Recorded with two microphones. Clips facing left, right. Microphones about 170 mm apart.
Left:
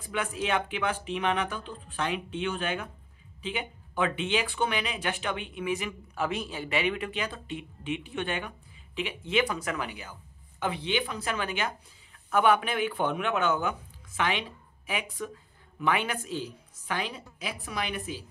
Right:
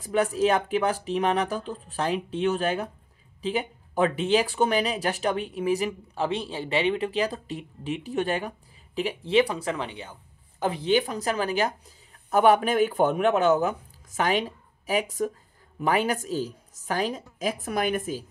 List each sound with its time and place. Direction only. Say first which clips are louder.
0.0 s speech: right 9 dB; 40° right (ahead or behind)
10.6 s speech: right 6 dB; 40° right (ahead or behind)